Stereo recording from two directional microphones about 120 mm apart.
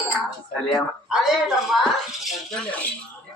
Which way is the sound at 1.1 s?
5° right (ahead or behind).